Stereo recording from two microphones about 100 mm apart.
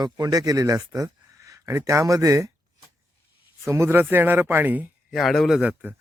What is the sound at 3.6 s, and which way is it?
Speech, 25° right (ahead or behind).